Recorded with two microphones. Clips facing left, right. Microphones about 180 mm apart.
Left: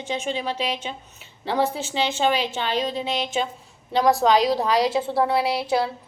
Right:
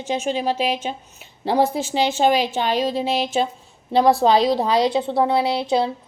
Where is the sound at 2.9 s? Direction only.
40° right (ahead or behind); by 5.9 s 20° right (ahead or behind).